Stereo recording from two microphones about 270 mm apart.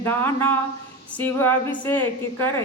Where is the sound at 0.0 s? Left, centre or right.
Centre.